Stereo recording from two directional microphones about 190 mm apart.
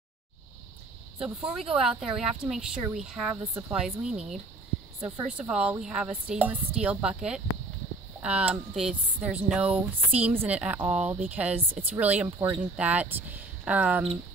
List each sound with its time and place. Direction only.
1.2 s speech: 5° right (ahead or behind)